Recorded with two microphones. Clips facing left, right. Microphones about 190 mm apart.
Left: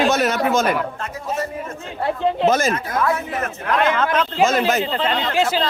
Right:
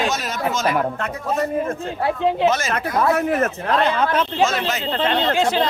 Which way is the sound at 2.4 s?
50° left (ahead or behind).